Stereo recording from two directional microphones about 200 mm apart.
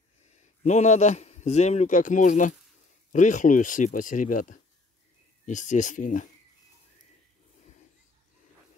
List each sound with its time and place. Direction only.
0.7 s a man's voice: 35° left (ahead or behind)